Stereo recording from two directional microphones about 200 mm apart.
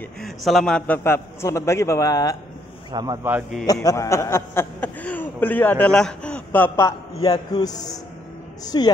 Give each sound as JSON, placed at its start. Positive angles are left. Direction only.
{"t": 0.2, "sound": "a man's voice", "side_deg": 0}
{"t": 2.9, "sound": "speech", "side_deg": -20}
{"t": 3.8, "sound": "a man's voice", "side_deg": 15}